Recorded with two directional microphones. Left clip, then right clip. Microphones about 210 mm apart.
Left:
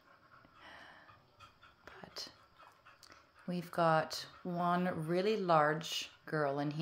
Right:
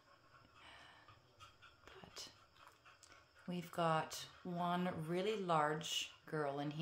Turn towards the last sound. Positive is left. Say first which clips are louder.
# left 7 dB
turn(degrees=25)  # may be behind; listen again after turning